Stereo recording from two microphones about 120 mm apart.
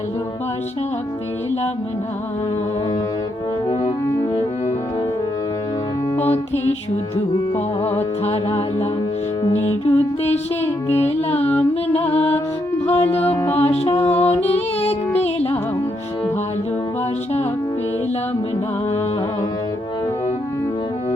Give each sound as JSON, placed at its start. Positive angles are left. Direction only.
{"t": 6.2, "sound": "music", "side_deg": 60}
{"t": 7.5, "sound": "music", "side_deg": 15}
{"t": 8.2, "sound": "music", "side_deg": 55}
{"t": 13.2, "sound": "music", "side_deg": 20}
{"t": 13.6, "sound": "music", "side_deg": 55}